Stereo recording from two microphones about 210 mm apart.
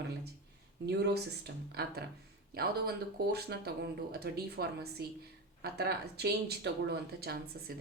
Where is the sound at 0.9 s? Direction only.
55° right (ahead or behind).